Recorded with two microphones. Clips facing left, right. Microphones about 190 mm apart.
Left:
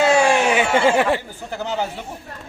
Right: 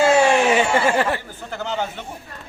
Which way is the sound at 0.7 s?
20° left (ahead or behind).